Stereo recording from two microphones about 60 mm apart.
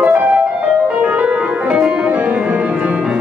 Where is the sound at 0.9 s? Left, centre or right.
Right.